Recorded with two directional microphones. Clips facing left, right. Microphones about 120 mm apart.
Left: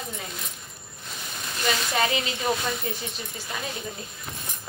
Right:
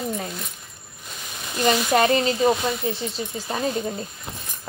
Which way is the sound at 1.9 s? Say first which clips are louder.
Right 7 dB; 45° right (ahead or behind).